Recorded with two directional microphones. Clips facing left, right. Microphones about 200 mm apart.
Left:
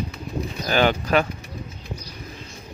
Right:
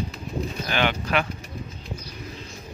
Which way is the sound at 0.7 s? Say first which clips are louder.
Left 6 dB; 40° left (ahead or behind).